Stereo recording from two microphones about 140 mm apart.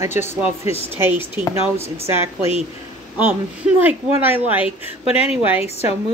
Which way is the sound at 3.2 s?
15° right (ahead or behind).